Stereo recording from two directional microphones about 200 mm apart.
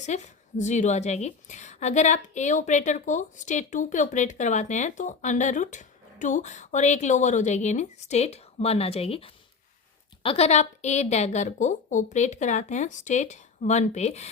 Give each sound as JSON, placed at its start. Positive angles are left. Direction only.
{"t": 0.0, "sound": "a woman's voice", "side_deg": 35}